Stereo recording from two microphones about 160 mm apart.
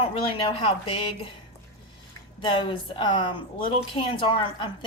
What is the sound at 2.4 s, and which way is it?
A woman's voice, 30° left (ahead or behind).